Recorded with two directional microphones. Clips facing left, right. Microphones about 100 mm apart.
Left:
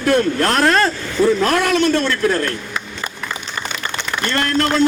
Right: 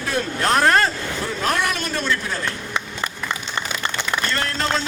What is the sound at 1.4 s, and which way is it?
A man's voice, 90° left.